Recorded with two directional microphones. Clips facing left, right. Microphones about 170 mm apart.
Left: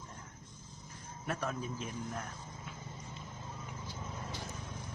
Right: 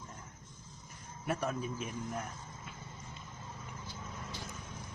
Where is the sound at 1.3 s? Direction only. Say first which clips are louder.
Right 2 dB; 10° right (ahead or behind).